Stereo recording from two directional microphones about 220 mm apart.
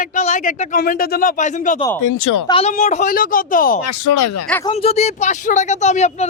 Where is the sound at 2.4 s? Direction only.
25° left (ahead or behind).